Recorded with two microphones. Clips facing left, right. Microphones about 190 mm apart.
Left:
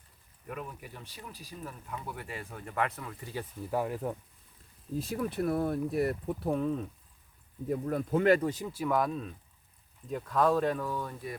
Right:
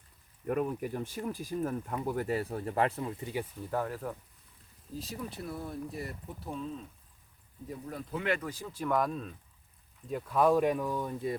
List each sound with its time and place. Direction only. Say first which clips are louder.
0.4 s speech: right 10 dB; 45° right (ahead or behind); by 3.4 s 20° right (ahead or behind)
3.6 s speech: left 5 dB; 10° left (ahead or behind)
4.9 s speech: left 8 dB; 60° left (ahead or behind)
7.7 s speech: left 9 dB; 55° left (ahead or behind)
8.4 s speech: left 6 dB; 20° left (ahead or behind)
8.7 s speech: right 2 dB; 5° left (ahead or behind); by 11.3 s 20° right (ahead or behind)